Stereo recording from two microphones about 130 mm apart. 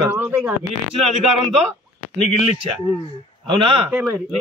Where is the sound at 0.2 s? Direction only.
5° right (ahead or behind).